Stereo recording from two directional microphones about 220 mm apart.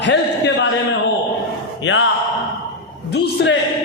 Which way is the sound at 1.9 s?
55° left (ahead or behind).